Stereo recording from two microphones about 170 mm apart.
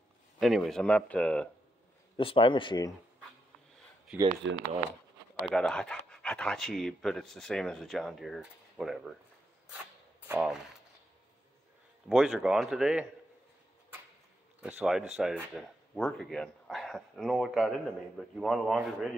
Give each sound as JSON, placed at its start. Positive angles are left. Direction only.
{"t": 0.4, "sound": "speech", "side_deg": 0}
{"t": 2.1, "sound": "speech", "side_deg": 30}
{"t": 4.1, "sound": "speech", "side_deg": -5}
{"t": 5.4, "sound": "speech", "side_deg": 5}
{"t": 10.2, "sound": "speech", "side_deg": -10}
{"t": 12.1, "sound": "speech", "side_deg": 0}
{"t": 14.6, "sound": "speech", "side_deg": -5}